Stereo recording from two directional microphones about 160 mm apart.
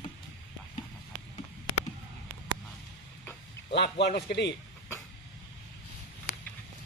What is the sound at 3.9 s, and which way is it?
Speech, 85° left.